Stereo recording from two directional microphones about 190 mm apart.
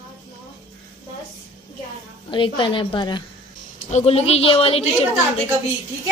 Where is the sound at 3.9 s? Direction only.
35° left (ahead or behind).